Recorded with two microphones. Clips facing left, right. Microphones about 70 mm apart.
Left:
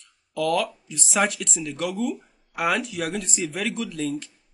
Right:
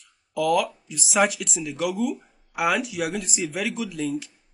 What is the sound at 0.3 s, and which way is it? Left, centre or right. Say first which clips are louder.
Speech: right 2 dB; centre.